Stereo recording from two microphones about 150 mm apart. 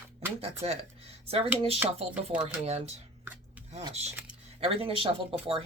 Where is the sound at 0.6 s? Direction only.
40° right (ahead or behind).